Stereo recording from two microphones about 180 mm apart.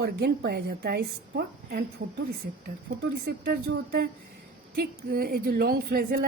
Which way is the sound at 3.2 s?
60° right (ahead or behind).